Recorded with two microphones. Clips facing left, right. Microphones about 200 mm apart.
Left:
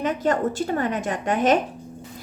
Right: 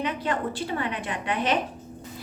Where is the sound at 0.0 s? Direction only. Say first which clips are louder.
Left 6 dB; 45° left (ahead or behind).